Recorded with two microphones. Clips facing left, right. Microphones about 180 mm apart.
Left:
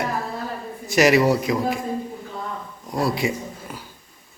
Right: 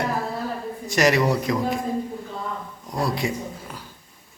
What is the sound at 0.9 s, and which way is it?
Speech, 5° left (ahead or behind).